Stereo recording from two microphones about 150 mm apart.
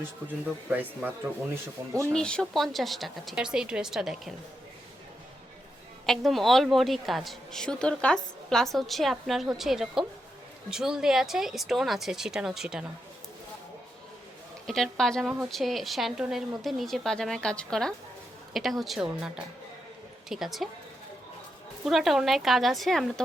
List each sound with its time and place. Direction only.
0.7 s speech: 10° right (ahead or behind)
2.1 s a woman's voice: 5° left (ahead or behind)
6.1 s a woman's voice: centre (ahead or behind)
14.7 s a woman's voice: 5° left (ahead or behind)
20.3 s a woman's voice: centre (ahead or behind)
21.8 s a woman's voice: centre (ahead or behind)